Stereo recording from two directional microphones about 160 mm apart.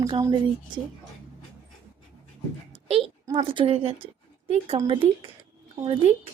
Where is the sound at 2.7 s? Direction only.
35° right (ahead or behind).